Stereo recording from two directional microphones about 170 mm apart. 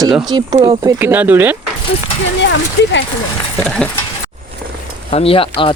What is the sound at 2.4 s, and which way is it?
Speech, 90° left.